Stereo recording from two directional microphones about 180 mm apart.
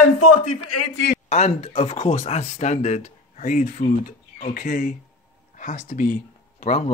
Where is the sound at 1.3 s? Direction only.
40° left (ahead or behind).